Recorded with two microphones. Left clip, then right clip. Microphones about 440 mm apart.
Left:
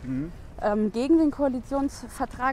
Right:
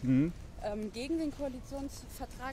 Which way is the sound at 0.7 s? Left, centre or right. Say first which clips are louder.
Left 14 dB; left.